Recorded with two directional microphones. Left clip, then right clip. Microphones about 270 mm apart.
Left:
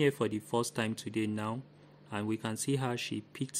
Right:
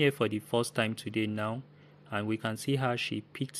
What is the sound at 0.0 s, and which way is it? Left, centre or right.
Speech, centre.